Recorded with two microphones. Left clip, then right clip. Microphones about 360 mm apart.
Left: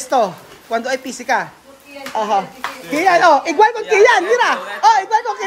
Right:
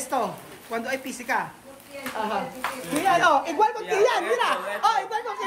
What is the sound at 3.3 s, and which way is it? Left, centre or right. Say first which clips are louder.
A woman's voice: left 9 dB; left.